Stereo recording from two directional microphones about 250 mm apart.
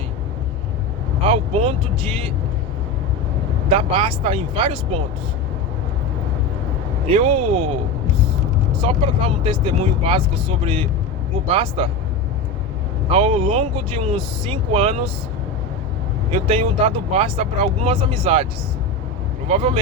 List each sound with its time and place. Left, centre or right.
1.2 s speech: right
3.7 s speech: right
7.1 s speech: right
8.8 s speech: right
13.1 s speech: right
16.3 s speech: right
19.5 s speech: right